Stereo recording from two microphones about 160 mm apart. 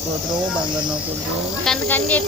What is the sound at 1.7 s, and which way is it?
Speech, 10° left (ahead or behind).